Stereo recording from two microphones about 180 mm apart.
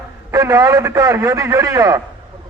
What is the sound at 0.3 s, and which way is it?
A man's voice, 15° right (ahead or behind).